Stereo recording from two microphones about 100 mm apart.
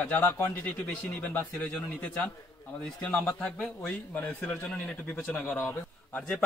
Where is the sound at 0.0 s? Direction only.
15° left (ahead or behind).